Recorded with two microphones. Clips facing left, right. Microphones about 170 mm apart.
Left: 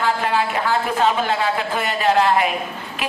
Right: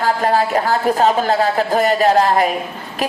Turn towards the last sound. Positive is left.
turn(degrees=-40)  # may be behind; listen again after turning